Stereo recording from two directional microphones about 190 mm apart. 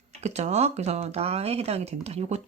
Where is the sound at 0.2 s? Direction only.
35° right (ahead or behind).